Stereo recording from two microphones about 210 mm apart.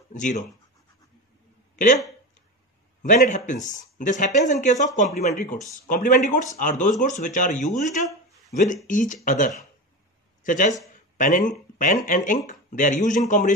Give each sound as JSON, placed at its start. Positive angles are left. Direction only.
{"t": 0.1, "sound": "speech", "side_deg": 35}
{"t": 3.0, "sound": "speech", "side_deg": 35}